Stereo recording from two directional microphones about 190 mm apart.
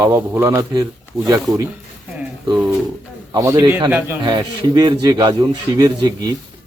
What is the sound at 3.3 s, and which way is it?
Speech, 15° right (ahead or behind).